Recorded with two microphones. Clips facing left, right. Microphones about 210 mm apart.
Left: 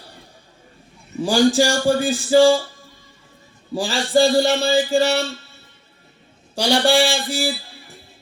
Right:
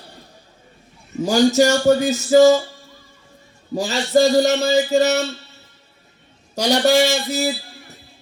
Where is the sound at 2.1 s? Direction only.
40° right (ahead or behind).